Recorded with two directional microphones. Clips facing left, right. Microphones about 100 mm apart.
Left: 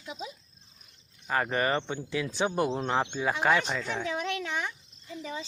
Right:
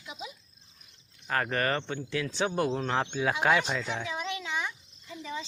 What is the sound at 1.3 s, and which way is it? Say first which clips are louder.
Speech: left 1 dB; 10° left (ahead or behind).